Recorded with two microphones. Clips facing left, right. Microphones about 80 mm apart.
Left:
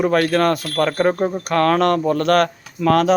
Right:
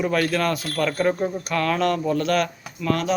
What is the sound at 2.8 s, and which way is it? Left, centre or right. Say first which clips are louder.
Speech: left 8 dB; left.